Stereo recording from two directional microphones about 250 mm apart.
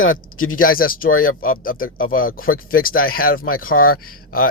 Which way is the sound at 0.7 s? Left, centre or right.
Left.